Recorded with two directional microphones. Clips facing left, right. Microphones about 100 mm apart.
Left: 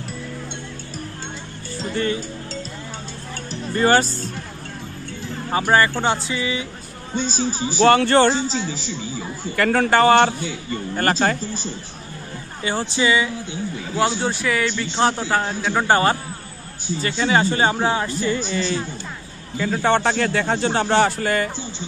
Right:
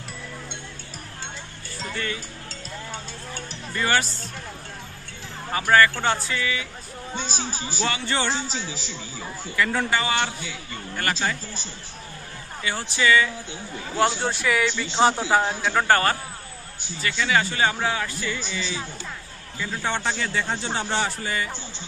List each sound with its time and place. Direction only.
1.8 s music: 30° left (ahead or behind)
3.7 s speech: 35° left (ahead or behind)
5.5 s speech: 25° left (ahead or behind)
7.8 s a man's voice: 55° left (ahead or behind)
8.5 s a man's voice: 5° right (ahead or behind)
9.6 s a man's voice: 60° left (ahead or behind)
12.6 s speech: 30° left (ahead or behind)
13.9 s a man's voice: centre (ahead or behind)
15.7 s speech: 15° left (ahead or behind)
17.0 s a man's voice: 35° left (ahead or behind); by 21.5 s 60° left (ahead or behind)